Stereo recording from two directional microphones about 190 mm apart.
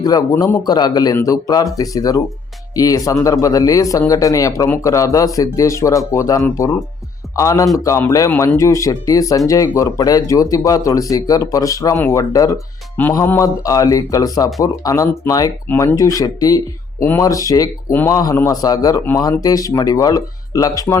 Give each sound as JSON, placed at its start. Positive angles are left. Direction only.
{"t": 0.0, "sound": "a man's voice", "side_deg": 20}